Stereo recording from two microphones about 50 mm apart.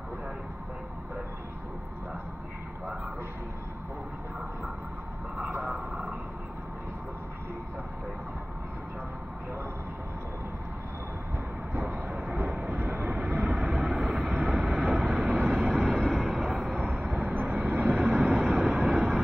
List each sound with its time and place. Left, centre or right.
12.2 s vehicle: right
13.3 s vehicle: centre
17.2 s vehicle: right
17.8 s vehicle: centre